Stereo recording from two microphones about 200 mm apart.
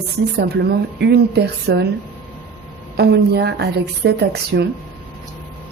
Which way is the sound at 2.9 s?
55° right (ahead or behind).